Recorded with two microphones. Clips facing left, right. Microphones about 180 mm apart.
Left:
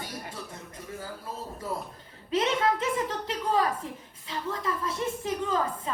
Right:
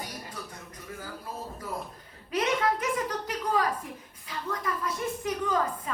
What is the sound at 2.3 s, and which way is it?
A woman's voice, 25° left (ahead or behind).